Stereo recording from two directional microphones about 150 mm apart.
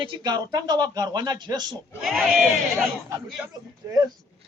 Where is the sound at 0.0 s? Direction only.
30° right (ahead or behind).